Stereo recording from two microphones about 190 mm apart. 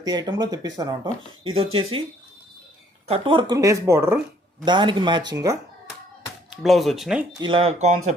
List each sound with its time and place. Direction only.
0.1 s speech: 20° right (ahead or behind)
3.1 s speech: 25° right (ahead or behind)
4.6 s speech: 25° right (ahead or behind)
6.5 s speech: centre (ahead or behind)
7.3 s speech: 25° right (ahead or behind)